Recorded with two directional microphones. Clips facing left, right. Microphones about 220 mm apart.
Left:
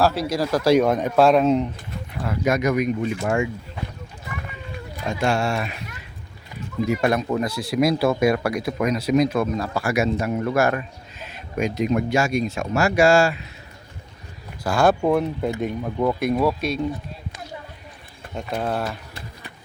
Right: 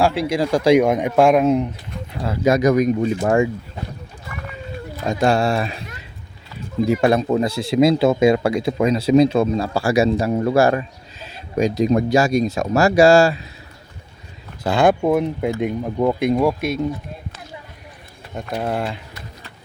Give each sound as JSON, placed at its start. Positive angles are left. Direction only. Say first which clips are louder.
{"t": 0.0, "sound": "a man's voice", "louder": "right 2 dB", "side_deg": -15}
{"t": 2.2, "sound": "speech", "louder": "right 5 dB", "side_deg": -30}
{"t": 5.0, "sound": "speech", "louder": "right 5 dB", "side_deg": -35}
{"t": 6.8, "sound": "speech", "louder": "right 4 dB", "side_deg": -30}
{"t": 14.6, "sound": "a man's voice", "louder": "right 2 dB", "side_deg": -20}
{"t": 18.3, "sound": "speech", "louder": "right 1 dB", "side_deg": 0}
{"t": 18.7, "sound": "a man's voice", "louder": "right 4 dB", "side_deg": -15}